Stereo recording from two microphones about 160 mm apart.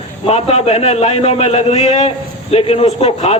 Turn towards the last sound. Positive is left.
turn(degrees=40)  # may be behind; listen again after turning